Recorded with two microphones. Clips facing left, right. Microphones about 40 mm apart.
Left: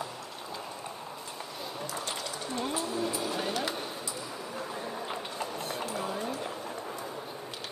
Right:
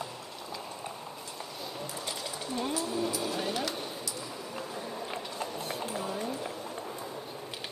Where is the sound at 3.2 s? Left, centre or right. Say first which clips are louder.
Even; centre.